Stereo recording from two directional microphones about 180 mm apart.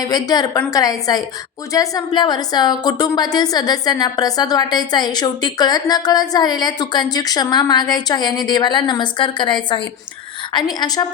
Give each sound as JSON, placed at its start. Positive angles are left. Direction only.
{"t": 0.0, "sound": "a woman's voice", "side_deg": 20}